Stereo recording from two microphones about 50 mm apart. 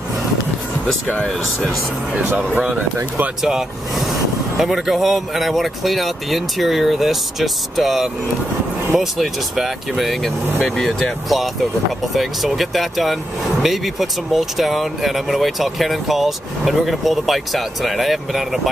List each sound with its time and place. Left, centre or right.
1.1 s speech: centre
3.4 s speech: centre